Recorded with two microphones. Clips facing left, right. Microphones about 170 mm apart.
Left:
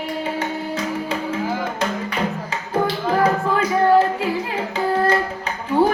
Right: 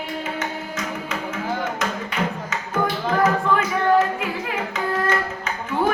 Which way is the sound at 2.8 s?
30° left (ahead or behind).